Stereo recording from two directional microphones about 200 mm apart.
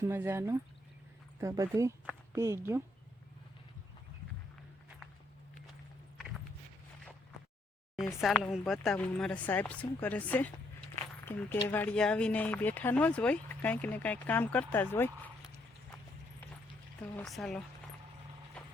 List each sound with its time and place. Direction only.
0.0 s speech: 10° right (ahead or behind)
8.2 s speech: centre (ahead or behind)
17.0 s speech: 5° left (ahead or behind)